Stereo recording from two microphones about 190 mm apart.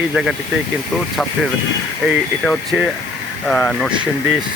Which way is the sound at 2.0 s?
5° right (ahead or behind).